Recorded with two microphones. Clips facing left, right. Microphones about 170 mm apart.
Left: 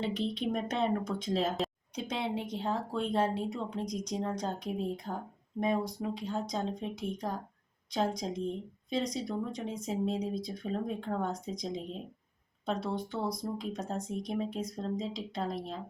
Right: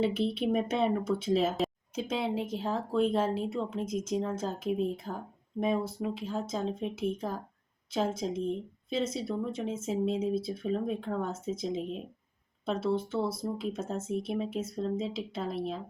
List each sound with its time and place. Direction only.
0.0 s speech: 5° right (ahead or behind)